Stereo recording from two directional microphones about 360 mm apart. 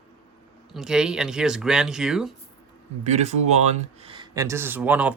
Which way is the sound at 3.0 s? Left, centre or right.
Centre.